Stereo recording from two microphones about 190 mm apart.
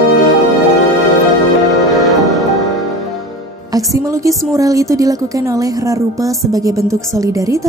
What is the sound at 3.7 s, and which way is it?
A woman's voice, 20° right (ahead or behind).